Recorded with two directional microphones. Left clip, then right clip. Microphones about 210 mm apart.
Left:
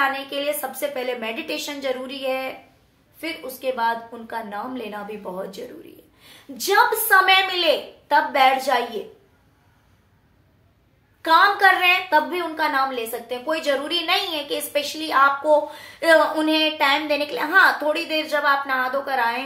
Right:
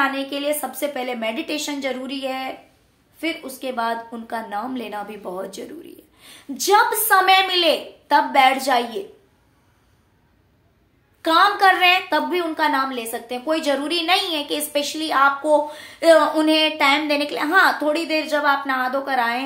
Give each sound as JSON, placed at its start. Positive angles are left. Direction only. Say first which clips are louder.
{"t": 0.0, "sound": "a woman's voice", "louder": "right 1 dB", "side_deg": -40}
{"t": 11.2, "sound": "a woman's voice", "louder": "even", "side_deg": -35}